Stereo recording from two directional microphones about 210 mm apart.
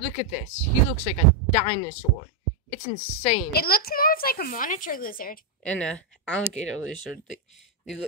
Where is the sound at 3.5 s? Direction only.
45° left (ahead or behind).